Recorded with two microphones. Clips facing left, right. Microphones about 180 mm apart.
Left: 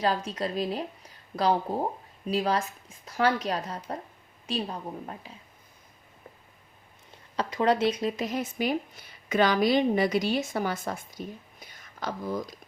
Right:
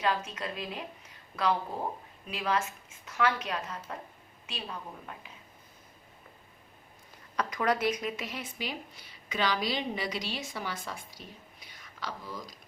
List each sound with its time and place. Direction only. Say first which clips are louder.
0.0 s a woman's voice: left 4 dB; 35° left (ahead or behind)
7.1 s speech: left 2 dB; 30° left (ahead or behind); by 11.2 s 45° left (ahead or behind)
11.6 s a sound: left 6 dB; 50° left (ahead or behind)